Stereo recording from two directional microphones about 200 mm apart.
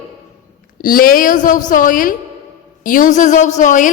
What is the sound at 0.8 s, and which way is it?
A woman's voice, 45° left (ahead or behind).